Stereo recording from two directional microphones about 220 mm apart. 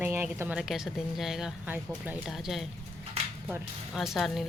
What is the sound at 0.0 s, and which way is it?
A woman's voice, 10° right (ahead or behind).